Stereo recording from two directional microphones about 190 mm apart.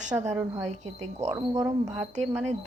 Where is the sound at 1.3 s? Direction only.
15° right (ahead or behind).